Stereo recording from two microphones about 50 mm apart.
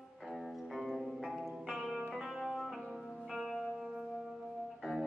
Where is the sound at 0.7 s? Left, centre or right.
Centre.